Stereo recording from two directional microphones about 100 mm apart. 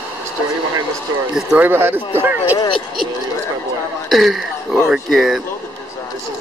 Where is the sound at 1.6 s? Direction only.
20° right (ahead or behind).